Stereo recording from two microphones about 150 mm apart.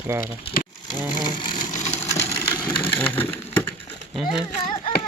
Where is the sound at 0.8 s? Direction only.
30° left (ahead or behind).